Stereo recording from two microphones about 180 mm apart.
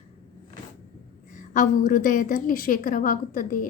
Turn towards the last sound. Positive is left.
turn(degrees=45)  # may be behind; listen again after turning